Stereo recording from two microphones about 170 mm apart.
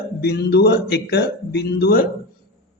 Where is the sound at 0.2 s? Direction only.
75° left (ahead or behind).